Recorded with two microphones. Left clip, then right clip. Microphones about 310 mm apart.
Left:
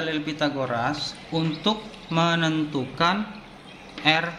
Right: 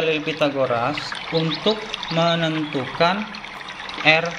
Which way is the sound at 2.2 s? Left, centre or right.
Centre.